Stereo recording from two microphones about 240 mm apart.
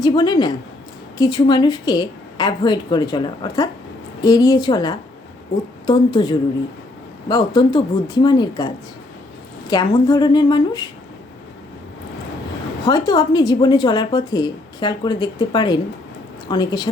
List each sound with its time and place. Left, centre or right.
0.0 s a woman's voice: centre
12.8 s a woman's voice: centre